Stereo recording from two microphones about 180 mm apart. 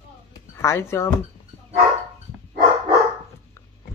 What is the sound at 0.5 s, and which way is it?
Speech, 15° left (ahead or behind).